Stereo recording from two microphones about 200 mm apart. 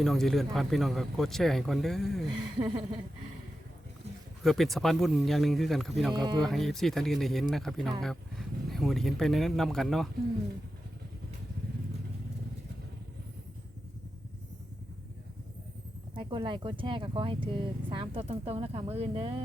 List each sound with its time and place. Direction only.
0.0 s speech: centre (ahead or behind)
2.3 s speech: 20° right (ahead or behind)
4.4 s speech: centre (ahead or behind)
16.1 s speech: 25° right (ahead or behind)